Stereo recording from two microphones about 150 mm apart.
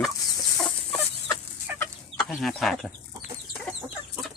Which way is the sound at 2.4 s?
Centre (ahead or behind).